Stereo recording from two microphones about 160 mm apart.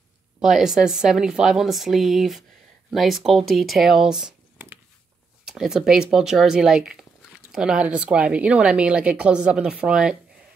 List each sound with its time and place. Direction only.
0.4 s speech: 5° right (ahead or behind)